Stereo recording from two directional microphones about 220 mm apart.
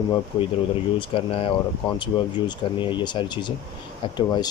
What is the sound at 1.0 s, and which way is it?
Speech, 25° left (ahead or behind).